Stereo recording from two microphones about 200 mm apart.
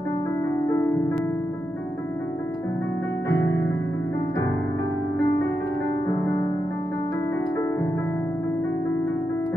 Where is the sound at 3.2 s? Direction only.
15° left (ahead or behind).